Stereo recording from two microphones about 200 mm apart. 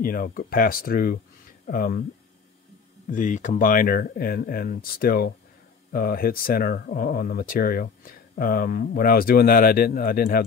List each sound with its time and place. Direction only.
0.0 s speech: 45° left (ahead or behind)
3.1 s speech: 40° left (ahead or behind)